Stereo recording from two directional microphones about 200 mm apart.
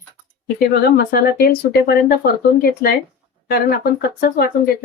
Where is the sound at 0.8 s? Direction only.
50° left (ahead or behind).